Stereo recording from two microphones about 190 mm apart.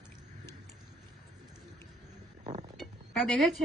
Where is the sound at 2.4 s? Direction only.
35° right (ahead or behind).